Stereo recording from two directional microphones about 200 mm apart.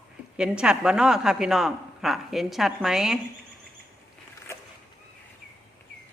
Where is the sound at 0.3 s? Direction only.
5° right (ahead or behind).